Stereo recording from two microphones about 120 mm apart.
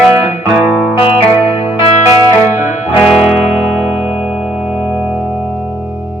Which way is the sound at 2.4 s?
25° right (ahead or behind).